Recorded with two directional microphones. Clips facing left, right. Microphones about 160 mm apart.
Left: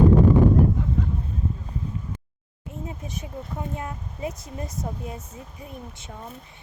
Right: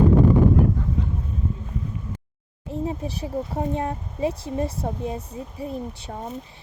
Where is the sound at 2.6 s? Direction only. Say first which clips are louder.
Right 8 dB; 35° right (ahead or behind).